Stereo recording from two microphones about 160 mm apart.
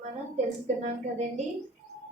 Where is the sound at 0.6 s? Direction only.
45° right (ahead or behind).